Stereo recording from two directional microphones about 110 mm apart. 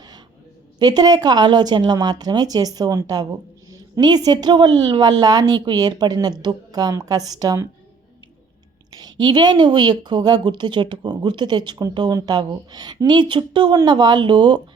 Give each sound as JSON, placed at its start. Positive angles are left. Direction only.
{"t": 0.8, "sound": "a woman's voice", "side_deg": -40}
{"t": 8.9, "sound": "a woman's voice", "side_deg": -40}